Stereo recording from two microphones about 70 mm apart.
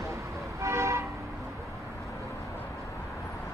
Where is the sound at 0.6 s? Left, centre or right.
Right.